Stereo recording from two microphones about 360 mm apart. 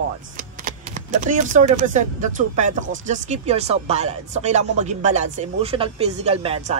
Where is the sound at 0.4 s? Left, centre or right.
Right.